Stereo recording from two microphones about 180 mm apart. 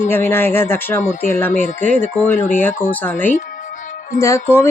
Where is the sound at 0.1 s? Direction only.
10° left (ahead or behind).